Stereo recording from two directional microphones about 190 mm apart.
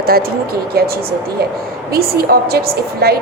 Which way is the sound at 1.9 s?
55° right (ahead or behind).